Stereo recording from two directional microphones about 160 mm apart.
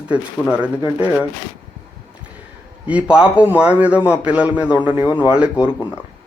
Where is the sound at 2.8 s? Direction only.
5° right (ahead or behind).